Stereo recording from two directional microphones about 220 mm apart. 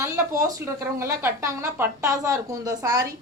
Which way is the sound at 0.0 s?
15° right (ahead or behind).